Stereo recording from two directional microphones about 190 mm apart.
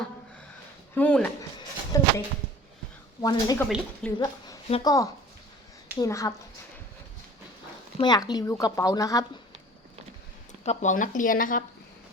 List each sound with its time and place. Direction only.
0.9 s speech: 10° left (ahead or behind)
1.9 s a sound: 15° left (ahead or behind)
3.2 s speech: 20° left (ahead or behind)
4.0 s a woman's voice: 5° left (ahead or behind)
4.7 s speech: 20° left (ahead or behind)
7.9 s speech: 20° left (ahead or behind)
10.6 s speech: 40° left (ahead or behind)